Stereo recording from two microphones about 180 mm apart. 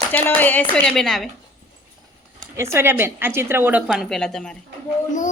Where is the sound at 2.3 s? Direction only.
15° right (ahead or behind); by 4.6 s 5° left (ahead or behind).